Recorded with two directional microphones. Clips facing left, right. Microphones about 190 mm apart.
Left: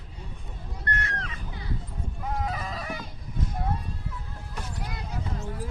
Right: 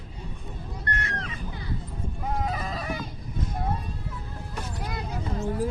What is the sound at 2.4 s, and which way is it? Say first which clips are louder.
Neigh: right 2 dB; 25° right (ahead or behind).